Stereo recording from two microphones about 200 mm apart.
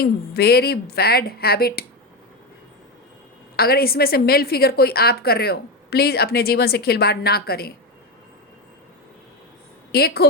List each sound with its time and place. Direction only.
0.0 s a woman's voice: 50° left (ahead or behind)
3.5 s a woman's voice: 50° left (ahead or behind)
9.9 s a woman's voice: 50° left (ahead or behind)